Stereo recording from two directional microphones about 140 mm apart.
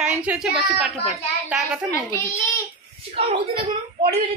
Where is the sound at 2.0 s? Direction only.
20° left (ahead or behind).